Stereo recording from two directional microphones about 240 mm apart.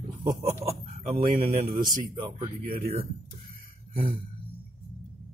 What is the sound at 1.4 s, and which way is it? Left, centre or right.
A man's voice, right.